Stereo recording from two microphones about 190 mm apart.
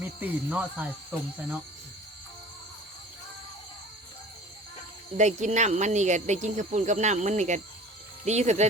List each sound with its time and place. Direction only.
0.0 s speech: 10° right (ahead or behind)
5.1 s speech: 40° right (ahead or behind)